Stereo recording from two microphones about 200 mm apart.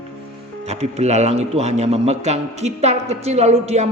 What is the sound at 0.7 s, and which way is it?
A man's voice, 35° right (ahead or behind).